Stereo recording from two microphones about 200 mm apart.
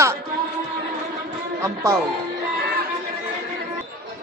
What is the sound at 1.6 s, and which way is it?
Speech, 15° right (ahead or behind).